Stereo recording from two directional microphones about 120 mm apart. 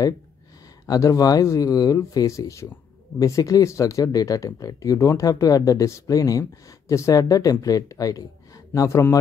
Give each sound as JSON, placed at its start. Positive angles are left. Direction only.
{"t": 0.8, "sound": "speech", "side_deg": 30}